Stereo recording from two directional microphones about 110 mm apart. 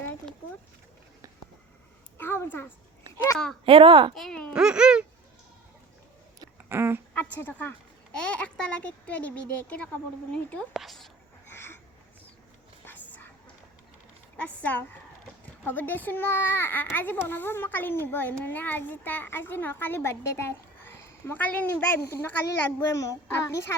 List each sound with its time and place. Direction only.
2.1 s a sound: 20° left (ahead or behind)
3.3 s a child's voice: 5° left (ahead or behind)
3.7 s speech: 55° right (ahead or behind)
4.1 s a sound: 5° left (ahead or behind)
4.5 s speech: 10° right (ahead or behind)
6.7 s speech: 20° right (ahead or behind)
7.1 s speech: 15° left (ahead or behind)
11.4 s a sound: 20° left (ahead or behind)
12.8 s whispering: 15° left (ahead or behind)
14.3 s a child's voice: 15° left (ahead or behind); by 23.1 s 30° left (ahead or behind)